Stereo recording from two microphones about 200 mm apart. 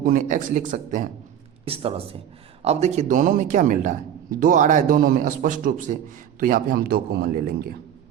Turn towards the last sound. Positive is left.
turn(degrees=-50)  # may be behind; listen again after turning